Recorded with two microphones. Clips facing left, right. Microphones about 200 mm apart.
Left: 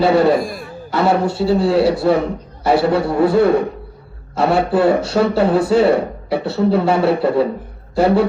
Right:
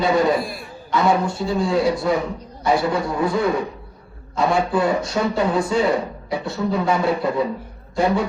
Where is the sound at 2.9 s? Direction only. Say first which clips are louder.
Left 7 dB; 65° left (ahead or behind).